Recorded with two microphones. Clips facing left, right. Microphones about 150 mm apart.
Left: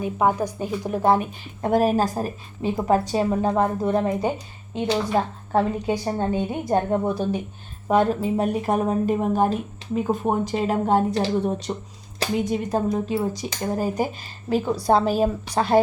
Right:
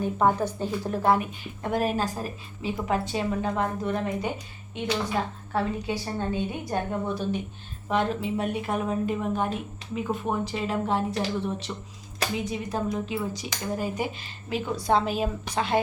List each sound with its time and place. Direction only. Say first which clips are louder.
0.0 s a woman's voice: left 2 dB; 10° left (ahead or behind)
1.6 s speech: left 7 dB; 40° left (ahead or behind)